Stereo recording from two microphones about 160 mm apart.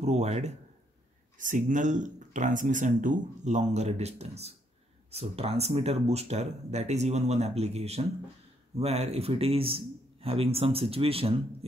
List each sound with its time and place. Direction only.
0.0 s speech: 45° right (ahead or behind)